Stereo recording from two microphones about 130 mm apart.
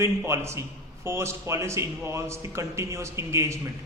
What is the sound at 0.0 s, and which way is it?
A man's voice, 20° right (ahead or behind).